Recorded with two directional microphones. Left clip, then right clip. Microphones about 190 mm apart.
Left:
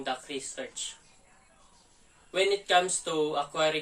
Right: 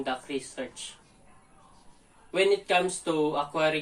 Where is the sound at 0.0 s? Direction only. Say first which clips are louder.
Right 2 dB; 20° left (ahead or behind).